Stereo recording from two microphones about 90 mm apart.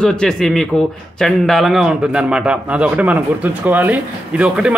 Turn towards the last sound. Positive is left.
turn(degrees=-10)  # may be behind; listen again after turning